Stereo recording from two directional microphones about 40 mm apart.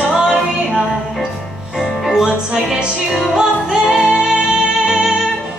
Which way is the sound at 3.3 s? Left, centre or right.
Centre.